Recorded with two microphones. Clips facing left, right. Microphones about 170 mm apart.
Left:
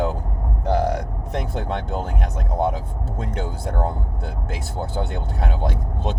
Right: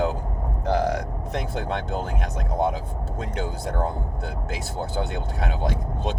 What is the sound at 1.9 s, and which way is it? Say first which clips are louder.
Speech: left 1 dB; 55° left (ahead or behind).